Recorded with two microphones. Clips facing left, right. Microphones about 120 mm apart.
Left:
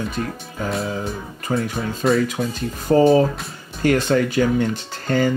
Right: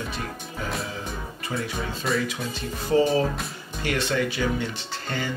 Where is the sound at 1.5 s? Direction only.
50° left (ahead or behind).